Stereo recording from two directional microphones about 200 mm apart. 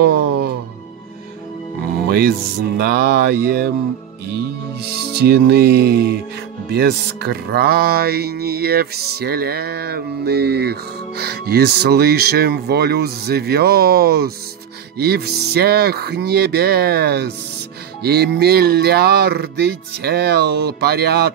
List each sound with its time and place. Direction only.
0.0 s music: 55° right (ahead or behind)
2.0 s music: 55° right (ahead or behind)
4.9 s music: 55° right (ahead or behind)